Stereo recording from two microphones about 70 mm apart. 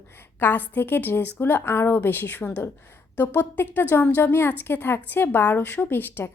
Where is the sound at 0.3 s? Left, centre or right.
Left.